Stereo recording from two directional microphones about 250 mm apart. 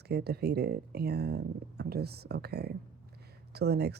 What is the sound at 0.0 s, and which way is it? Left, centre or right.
Speech, right.